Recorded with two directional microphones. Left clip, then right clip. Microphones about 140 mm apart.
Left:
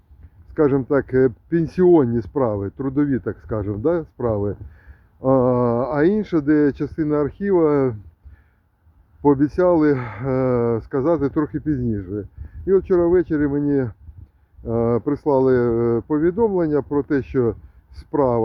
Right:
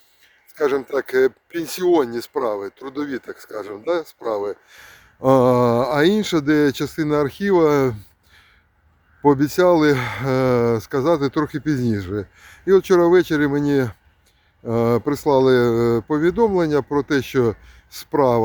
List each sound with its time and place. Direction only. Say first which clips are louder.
0.5 s speech: left 2 dB; 25° right (ahead or behind)
9.2 s speech: right 1 dB; 20° right (ahead or behind)